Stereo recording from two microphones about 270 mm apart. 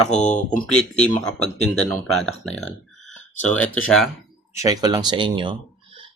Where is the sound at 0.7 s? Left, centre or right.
Centre.